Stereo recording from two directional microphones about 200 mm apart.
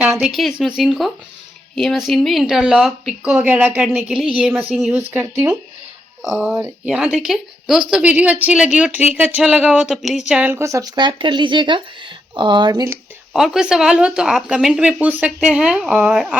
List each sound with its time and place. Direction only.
0.0 s speech: centre (ahead or behind); by 13.0 s 15° right (ahead or behind)
13.3 s speech: centre (ahead or behind)